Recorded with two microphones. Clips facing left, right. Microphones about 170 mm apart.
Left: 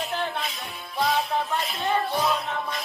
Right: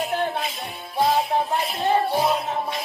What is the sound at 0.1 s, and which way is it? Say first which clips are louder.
Music: right 4 dB; 50° right (ahead or behind).